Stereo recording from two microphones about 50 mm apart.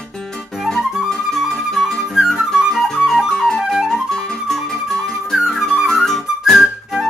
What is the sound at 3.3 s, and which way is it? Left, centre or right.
Flute, centre.